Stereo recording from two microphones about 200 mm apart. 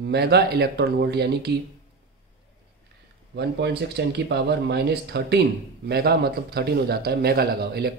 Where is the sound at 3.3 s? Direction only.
55° right (ahead or behind).